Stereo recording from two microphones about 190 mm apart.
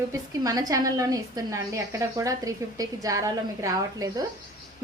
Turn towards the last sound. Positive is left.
turn(degrees=-20)  # may be behind; listen again after turning